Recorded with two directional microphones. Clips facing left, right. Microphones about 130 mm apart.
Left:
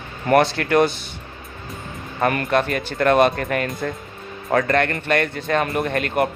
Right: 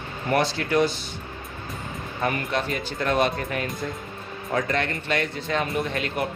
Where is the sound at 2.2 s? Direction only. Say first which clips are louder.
Left 7 dB; 60° left (ahead or behind).